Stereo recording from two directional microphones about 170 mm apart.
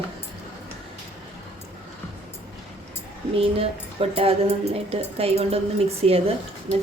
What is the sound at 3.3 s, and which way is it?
Speech, 35° right (ahead or behind).